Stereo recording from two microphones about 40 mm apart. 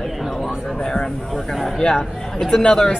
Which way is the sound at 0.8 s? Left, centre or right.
Centre.